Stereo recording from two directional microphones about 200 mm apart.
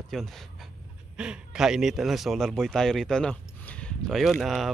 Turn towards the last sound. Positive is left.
turn(degrees=0)  # may be behind; listen again after turning